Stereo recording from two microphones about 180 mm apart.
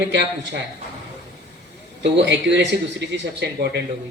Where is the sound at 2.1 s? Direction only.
75° right (ahead or behind).